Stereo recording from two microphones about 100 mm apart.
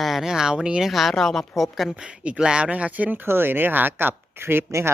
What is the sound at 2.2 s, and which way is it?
Speech, 10° right (ahead or behind).